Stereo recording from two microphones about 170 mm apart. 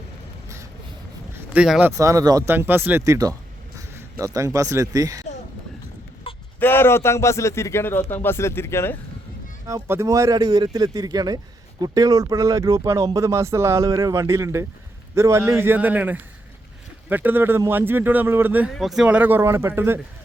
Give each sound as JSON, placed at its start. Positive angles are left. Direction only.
{"t": 1.5, "sound": "speech", "side_deg": -5}
{"t": 2.0, "sound": "speech", "side_deg": -20}
{"t": 6.3, "sound": "a sound", "side_deg": 30}
{"t": 6.6, "sound": "a man's voice", "side_deg": 15}
{"t": 9.6, "sound": "speech", "side_deg": -15}
{"t": 18.7, "sound": "speech", "side_deg": 0}